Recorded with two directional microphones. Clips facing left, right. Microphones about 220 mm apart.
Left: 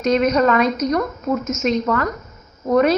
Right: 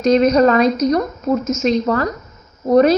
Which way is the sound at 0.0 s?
35° right (ahead or behind).